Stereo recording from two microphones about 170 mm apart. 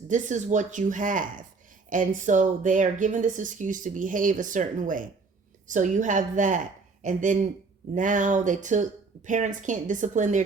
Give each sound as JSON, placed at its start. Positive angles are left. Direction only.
{"t": 0.1, "sound": "a woman's voice", "side_deg": -45}